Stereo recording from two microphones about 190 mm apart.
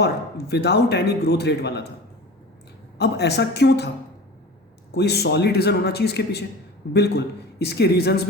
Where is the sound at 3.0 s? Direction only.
60° left (ahead or behind).